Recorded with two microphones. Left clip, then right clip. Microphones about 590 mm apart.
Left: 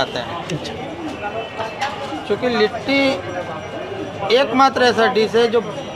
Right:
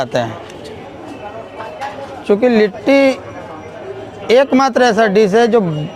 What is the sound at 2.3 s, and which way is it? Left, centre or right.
Speech, right.